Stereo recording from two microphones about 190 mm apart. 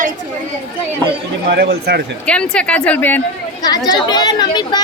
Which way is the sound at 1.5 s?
60° right (ahead or behind).